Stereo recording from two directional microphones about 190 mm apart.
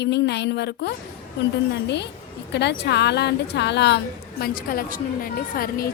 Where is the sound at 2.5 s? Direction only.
60° left (ahead or behind).